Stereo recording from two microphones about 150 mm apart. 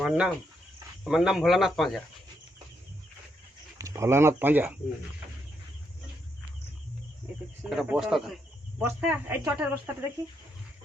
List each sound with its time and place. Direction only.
0.0 s speech: centre (ahead or behind)
3.8 s speech: 20° right (ahead or behind)
7.7 s speech: 5° right (ahead or behind)
8.8 s speech: 15° right (ahead or behind)